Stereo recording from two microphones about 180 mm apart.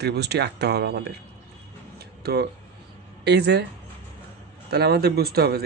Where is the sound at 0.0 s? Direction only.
65° right (ahead or behind).